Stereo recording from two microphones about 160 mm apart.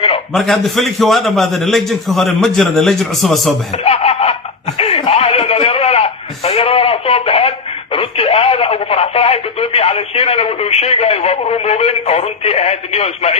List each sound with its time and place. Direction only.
0.3 s a man's voice: centre (ahead or behind)
3.8 s snicker: 40° left (ahead or behind)
4.8 s a sound: 35° left (ahead or behind)
7.9 s speech: 35° left (ahead or behind)